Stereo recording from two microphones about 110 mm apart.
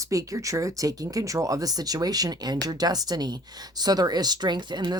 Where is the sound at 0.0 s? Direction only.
30° right (ahead or behind).